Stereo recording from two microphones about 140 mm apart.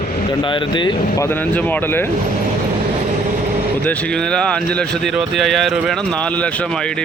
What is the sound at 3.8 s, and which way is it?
Speech, 10° left (ahead or behind).